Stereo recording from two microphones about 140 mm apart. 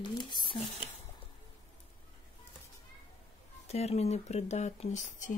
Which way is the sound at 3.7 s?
50° left (ahead or behind).